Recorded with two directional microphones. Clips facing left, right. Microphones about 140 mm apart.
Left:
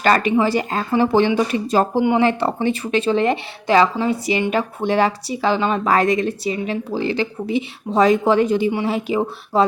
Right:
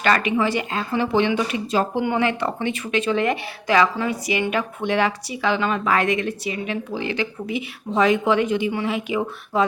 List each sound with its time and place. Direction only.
0.0 s speech: 35° left (ahead or behind)
2.0 s speech: 30° left (ahead or behind)